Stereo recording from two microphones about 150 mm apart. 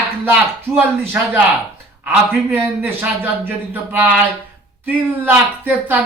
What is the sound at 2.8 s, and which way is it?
Speech, 15° right (ahead or behind).